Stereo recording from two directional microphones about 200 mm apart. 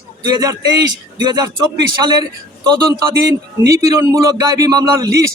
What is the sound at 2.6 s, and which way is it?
A man's voice, 20° right (ahead or behind).